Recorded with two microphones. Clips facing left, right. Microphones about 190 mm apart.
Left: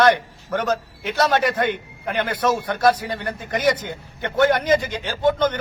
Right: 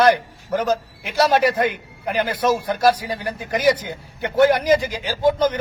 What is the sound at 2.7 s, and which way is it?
A man's voice, 10° right (ahead or behind).